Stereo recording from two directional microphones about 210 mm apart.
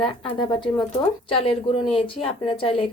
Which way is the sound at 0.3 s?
25° left (ahead or behind).